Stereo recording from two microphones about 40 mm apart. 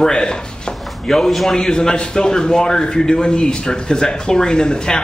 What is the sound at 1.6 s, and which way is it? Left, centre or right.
A man's voice, centre.